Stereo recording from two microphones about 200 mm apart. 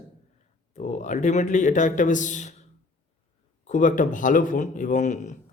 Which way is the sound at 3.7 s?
40° left (ahead or behind).